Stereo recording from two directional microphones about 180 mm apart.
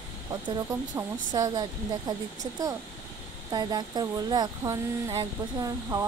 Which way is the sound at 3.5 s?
20° right (ahead or behind).